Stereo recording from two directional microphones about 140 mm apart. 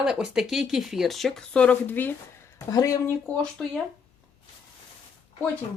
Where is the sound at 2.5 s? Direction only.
25° left (ahead or behind).